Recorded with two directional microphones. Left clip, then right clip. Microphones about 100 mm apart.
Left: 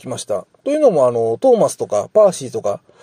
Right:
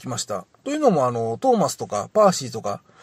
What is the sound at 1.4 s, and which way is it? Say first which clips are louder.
Speech: left 5 dB; 10° left (ahead or behind).